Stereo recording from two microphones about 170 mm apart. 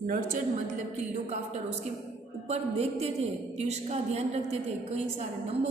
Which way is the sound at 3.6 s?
40° right (ahead or behind).